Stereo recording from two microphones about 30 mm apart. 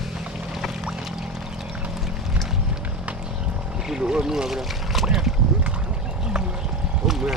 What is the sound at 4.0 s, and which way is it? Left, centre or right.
Boat, right.